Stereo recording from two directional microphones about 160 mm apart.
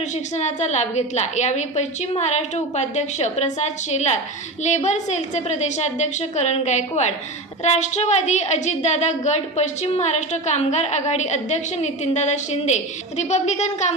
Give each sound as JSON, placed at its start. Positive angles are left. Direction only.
{"t": 0.3, "sound": "a woman's voice", "side_deg": 45}